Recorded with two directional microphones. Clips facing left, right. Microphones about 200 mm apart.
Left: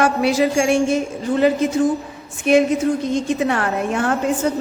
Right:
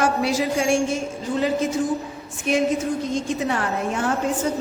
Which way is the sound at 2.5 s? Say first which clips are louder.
Left 7 dB; 65° left (ahead or behind).